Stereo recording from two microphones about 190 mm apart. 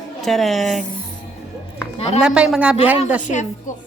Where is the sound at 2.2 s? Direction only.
5° right (ahead or behind).